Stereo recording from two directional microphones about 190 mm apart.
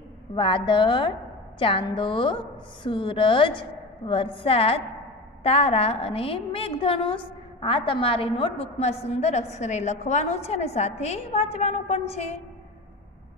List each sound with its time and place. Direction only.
0.4 s a woman's voice: 25° left (ahead or behind)